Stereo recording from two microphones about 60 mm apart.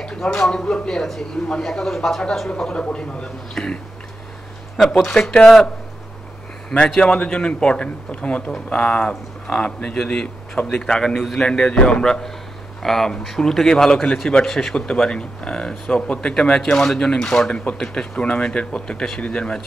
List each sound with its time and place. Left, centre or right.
0.0 s speech: centre
2.6 s speech: centre
7.0 s speech: centre
11.4 s speech: centre
14.8 s speech: centre